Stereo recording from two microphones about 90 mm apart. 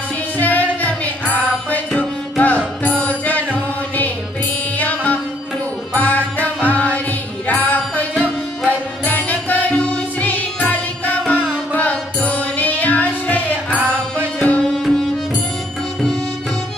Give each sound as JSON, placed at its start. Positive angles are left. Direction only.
{"t": 0.4, "sound": "music", "side_deg": 20}
{"t": 9.0, "sound": "music", "side_deg": 20}